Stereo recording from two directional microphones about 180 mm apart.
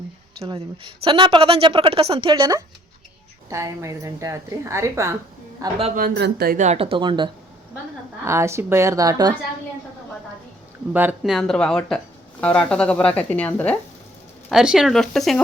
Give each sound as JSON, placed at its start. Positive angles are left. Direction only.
{"t": 0.4, "sound": "a woman's voice", "side_deg": -30}
{"t": 6.0, "sound": "speech", "side_deg": -65}
{"t": 6.7, "sound": "a woman's voice", "side_deg": -30}
{"t": 8.2, "sound": "a woman's voice", "side_deg": -15}
{"t": 10.9, "sound": "speech", "side_deg": -5}
{"t": 14.5, "sound": "speech", "side_deg": -5}